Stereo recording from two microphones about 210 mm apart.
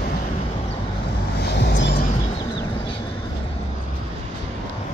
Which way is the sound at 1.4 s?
55° left (ahead or behind).